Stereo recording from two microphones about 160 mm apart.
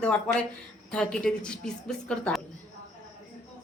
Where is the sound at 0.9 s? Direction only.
5° left (ahead or behind).